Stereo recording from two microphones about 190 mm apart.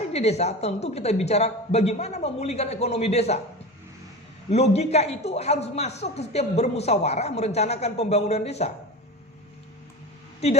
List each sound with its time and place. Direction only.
0.1 s a man's voice: 35° left (ahead or behind)
4.5 s a man's voice: 35° left (ahead or behind)